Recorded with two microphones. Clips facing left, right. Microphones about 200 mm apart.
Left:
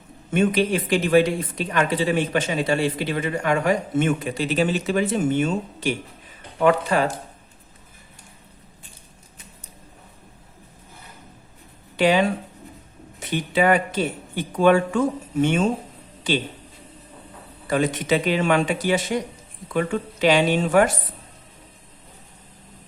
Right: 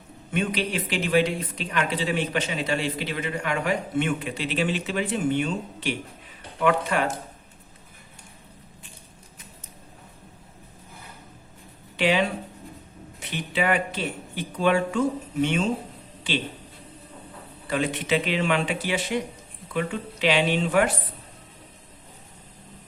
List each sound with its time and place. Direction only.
0.3 s speech: 45° left (ahead or behind)
11.9 s speech: 45° left (ahead or behind)
13.2 s speech: 45° left (ahead or behind)
17.7 s speech: 45° left (ahead or behind)